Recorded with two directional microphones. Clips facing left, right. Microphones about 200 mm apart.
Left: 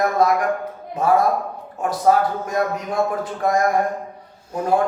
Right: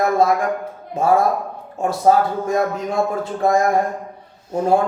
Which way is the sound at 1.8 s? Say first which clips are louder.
Right 2 dB; 25° right (ahead or behind).